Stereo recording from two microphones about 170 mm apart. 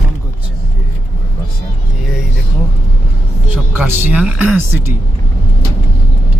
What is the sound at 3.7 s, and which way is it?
Speech, 10° right (ahead or behind).